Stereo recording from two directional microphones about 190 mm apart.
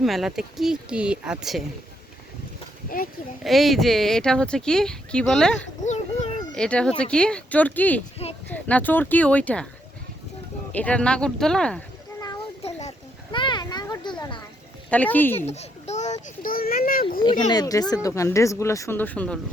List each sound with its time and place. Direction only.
0.0 s speech: centre (ahead or behind)
2.9 s speech: 50° left (ahead or behind)
3.4 s speech: centre (ahead or behind)
5.8 s a sound: 35° left (ahead or behind)
6.5 s speech: 5° left (ahead or behind)
10.7 s speech: 5° left (ahead or behind)
13.3 s children playing: 25° left (ahead or behind)
14.8 s speech: 10° left (ahead or behind)
15.4 s a child's voice: 35° left (ahead or behind)
17.5 s speech: 20° left (ahead or behind)